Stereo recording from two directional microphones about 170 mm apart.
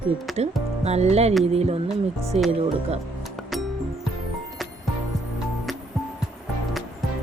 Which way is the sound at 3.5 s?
Centre (ahead or behind).